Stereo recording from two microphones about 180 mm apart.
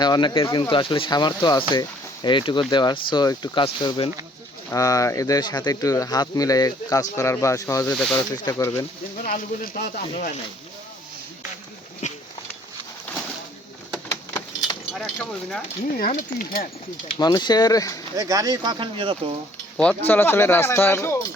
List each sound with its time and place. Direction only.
0.0 s speech: 25° left (ahead or behind)
7.9 s speech: 5° left (ahead or behind)
8.4 s speech: 15° left (ahead or behind)
9.1 s speech: 50° left (ahead or behind)
12.0 s a sound: 40° left (ahead or behind)
14.1 s a sound: 20° left (ahead or behind)
14.9 s keys jangling: 5° left (ahead or behind)
15.9 s speech: 50° left (ahead or behind)
17.2 s speech: 25° left (ahead or behind)
18.2 s speech: 20° right (ahead or behind)
19.7 s speech: 5° left (ahead or behind)